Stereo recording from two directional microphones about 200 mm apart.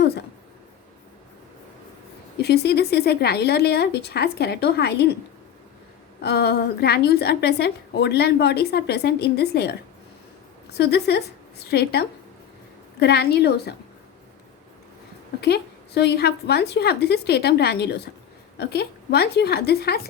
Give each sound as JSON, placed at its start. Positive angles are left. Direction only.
{"t": 0.0, "sound": "a sound", "side_deg": 55}
{"t": 2.4, "sound": "a woman's voice", "side_deg": 55}
{"t": 6.2, "sound": "a woman's voice", "side_deg": 55}
{"t": 10.8, "sound": "a woman's voice", "side_deg": 55}
{"t": 15.4, "sound": "a woman's voice", "side_deg": 55}